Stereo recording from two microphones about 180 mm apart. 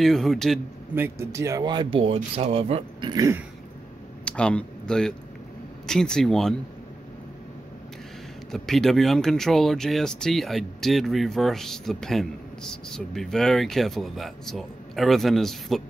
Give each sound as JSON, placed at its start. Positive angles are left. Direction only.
{"t": 0.0, "sound": "speech", "side_deg": 0}
{"t": 0.9, "sound": "speech", "side_deg": -15}
{"t": 4.2, "sound": "speech", "side_deg": 5}
{"t": 8.5, "sound": "speech", "side_deg": 0}